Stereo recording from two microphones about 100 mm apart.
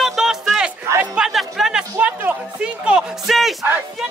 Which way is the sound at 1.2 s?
Centre (ahead or behind).